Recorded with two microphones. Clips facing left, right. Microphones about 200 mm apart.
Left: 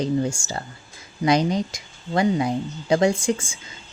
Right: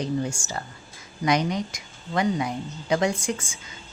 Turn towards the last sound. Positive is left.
turn(degrees=30)  # may be behind; listen again after turning